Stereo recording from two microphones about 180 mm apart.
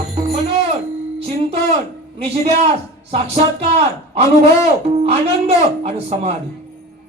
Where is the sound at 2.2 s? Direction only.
35° right (ahead or behind).